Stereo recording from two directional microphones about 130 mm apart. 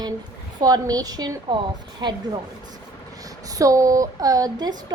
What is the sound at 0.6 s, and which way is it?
A woman's voice, 30° right (ahead or behind).